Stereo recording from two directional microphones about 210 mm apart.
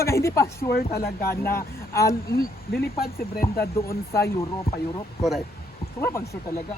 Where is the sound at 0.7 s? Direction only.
45° left (ahead or behind).